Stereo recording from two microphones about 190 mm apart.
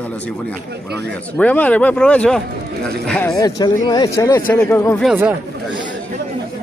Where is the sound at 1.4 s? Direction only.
10° left (ahead or behind).